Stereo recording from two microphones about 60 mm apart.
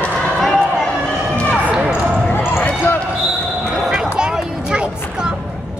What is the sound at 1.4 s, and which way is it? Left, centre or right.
Basketball bounce, left.